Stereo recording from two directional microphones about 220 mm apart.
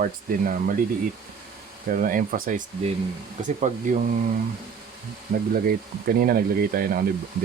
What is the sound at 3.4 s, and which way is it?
Speech, 30° right (ahead or behind).